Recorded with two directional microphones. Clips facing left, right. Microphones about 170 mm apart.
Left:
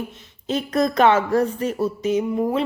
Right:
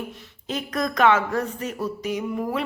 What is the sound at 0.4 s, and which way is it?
A woman's voice, 30° left (ahead or behind).